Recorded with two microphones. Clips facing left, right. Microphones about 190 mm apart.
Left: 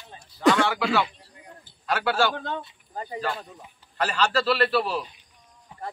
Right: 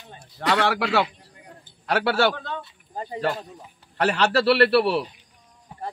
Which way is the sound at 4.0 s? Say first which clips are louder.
Right 4 dB; 65° right (ahead or behind).